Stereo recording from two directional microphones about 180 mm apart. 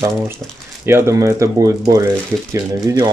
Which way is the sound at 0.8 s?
15° right (ahead or behind).